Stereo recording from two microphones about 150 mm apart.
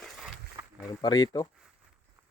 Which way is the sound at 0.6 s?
15° right (ahead or behind).